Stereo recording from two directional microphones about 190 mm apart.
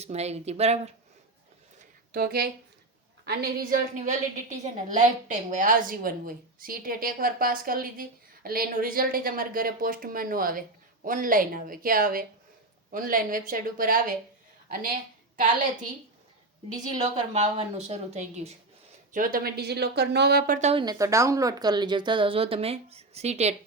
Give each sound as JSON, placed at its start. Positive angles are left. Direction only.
{"t": 0.0, "sound": "a woman's voice", "side_deg": -35}
{"t": 2.1, "sound": "a woman's voice", "side_deg": -55}
{"t": 17.2, "sound": "a woman's voice", "side_deg": -35}
{"t": 19.1, "sound": "speech", "side_deg": -50}
{"t": 20.6, "sound": "a woman's voice", "side_deg": -35}
{"t": 20.8, "sound": "speech", "side_deg": -15}